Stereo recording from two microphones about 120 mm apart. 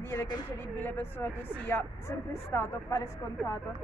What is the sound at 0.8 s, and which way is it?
Speech, 15° left (ahead or behind).